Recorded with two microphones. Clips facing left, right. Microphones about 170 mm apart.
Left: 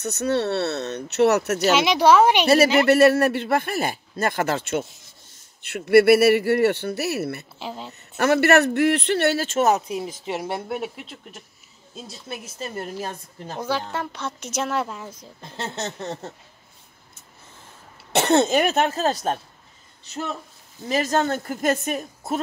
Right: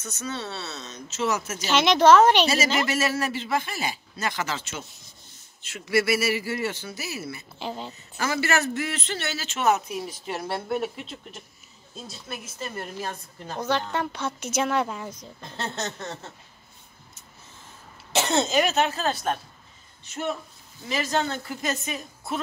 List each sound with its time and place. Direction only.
0.0 s a man's voice: 65° left (ahead or behind)
1.7 s speech: 5° left (ahead or behind)
2.4 s a man's voice: 60° left (ahead or behind)
7.5 s a woman's voice: centre (ahead or behind)
8.2 s a man's voice: 65° left (ahead or behind)
9.7 s speech: 30° left (ahead or behind); by 11.4 s 10° left (ahead or behind)
12.3 s speech: 25° left (ahead or behind)
13.6 s a woman's voice: 5° left (ahead or behind)
15.8 s speech: 30° left (ahead or behind)
18.1 s a woman's voice: 60° left (ahead or behind)